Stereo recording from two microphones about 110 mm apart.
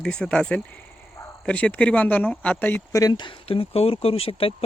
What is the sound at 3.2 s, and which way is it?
Speech, 55° left (ahead or behind).